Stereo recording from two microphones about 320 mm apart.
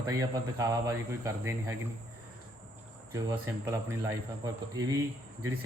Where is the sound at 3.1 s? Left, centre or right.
Centre.